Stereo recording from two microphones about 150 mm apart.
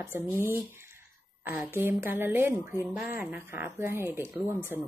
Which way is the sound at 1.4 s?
10° right (ahead or behind).